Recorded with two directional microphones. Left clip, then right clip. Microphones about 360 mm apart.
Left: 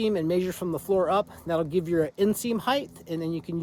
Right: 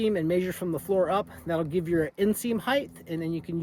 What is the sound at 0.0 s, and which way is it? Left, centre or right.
Speech, centre.